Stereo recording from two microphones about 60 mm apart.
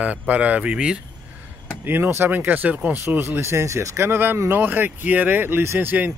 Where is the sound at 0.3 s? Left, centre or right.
Right.